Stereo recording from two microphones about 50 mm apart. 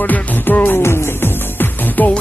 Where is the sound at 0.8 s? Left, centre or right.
Left.